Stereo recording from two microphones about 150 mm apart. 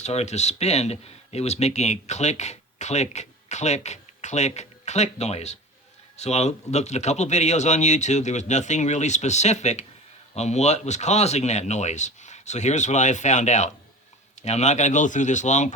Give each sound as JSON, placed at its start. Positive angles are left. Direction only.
{"t": 0.0, "sound": "speech", "side_deg": 45}